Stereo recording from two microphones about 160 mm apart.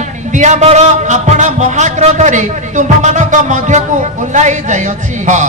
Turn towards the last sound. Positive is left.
turn(degrees=-50)  # may be behind; listen again after turning